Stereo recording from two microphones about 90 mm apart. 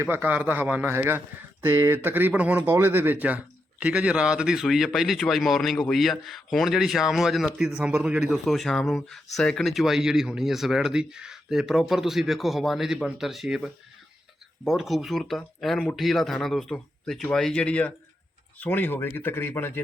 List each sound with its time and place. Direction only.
0.0 s a man's voice: 20° right (ahead or behind)
8.4 s speech: 5° left (ahead or behind); by 19.8 s 25° left (ahead or behind)